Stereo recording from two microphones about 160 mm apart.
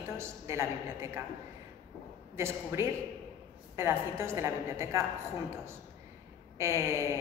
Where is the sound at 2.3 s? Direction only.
15° right (ahead or behind).